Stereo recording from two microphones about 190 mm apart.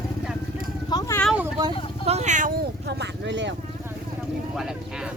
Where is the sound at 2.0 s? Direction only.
35° right (ahead or behind); by 3.5 s 70° right (ahead or behind).